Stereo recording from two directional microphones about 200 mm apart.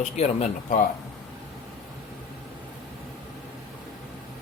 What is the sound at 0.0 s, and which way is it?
Speech, 35° left (ahead or behind).